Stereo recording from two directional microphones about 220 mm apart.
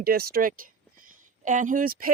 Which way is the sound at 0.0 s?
45° right (ahead or behind).